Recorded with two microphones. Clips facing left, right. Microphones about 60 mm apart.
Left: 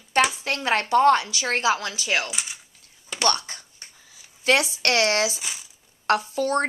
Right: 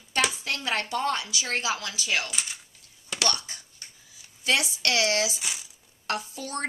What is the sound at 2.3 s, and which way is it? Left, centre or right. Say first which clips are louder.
Speech: left 2 dB; centre.